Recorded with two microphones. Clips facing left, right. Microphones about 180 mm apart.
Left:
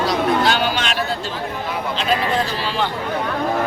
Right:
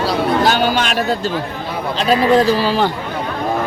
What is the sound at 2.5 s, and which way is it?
Speech, 40° right (ahead or behind).